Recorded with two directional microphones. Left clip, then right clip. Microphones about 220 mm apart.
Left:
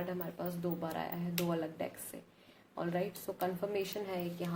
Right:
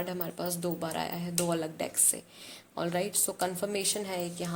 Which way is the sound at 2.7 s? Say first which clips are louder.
Right 6 dB; 45° right (ahead or behind).